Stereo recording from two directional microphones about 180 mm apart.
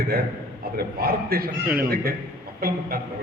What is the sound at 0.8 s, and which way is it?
Speech, 55° right (ahead or behind).